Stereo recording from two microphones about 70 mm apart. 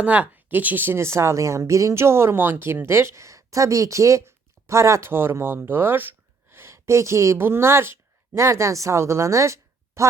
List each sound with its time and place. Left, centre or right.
0.0 s a woman's voice: right
7.3 s speech: right